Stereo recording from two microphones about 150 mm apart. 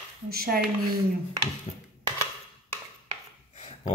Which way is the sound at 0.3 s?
90° right.